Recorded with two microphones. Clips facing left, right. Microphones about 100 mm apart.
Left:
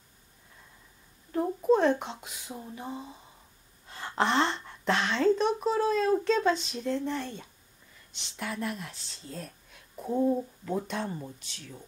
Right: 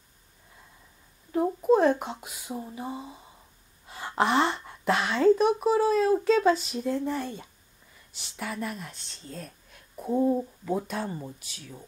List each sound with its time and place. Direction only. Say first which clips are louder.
1.6 s speech: right 2 dB; 5° right (ahead or behind)